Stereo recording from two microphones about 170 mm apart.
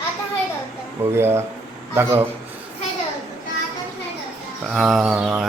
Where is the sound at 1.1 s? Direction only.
15° right (ahead or behind).